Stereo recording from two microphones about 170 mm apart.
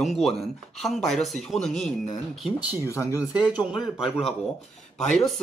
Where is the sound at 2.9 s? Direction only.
15° left (ahead or behind).